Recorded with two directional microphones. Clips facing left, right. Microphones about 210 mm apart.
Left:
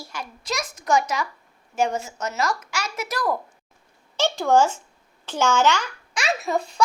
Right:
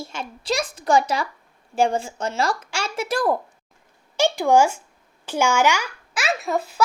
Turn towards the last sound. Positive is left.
turn(degrees=-5)  # may be behind; listen again after turning